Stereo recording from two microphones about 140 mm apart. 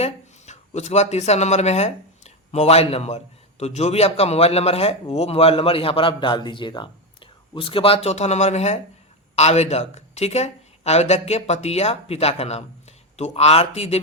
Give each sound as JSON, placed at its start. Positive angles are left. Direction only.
{"t": 0.0, "sound": "speech", "side_deg": 55}